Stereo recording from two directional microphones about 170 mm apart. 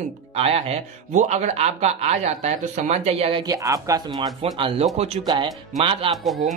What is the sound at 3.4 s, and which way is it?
Speech, 20° right (ahead or behind).